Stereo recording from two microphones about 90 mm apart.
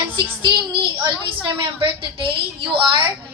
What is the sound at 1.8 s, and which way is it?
A woman's voice, 75° right (ahead or behind).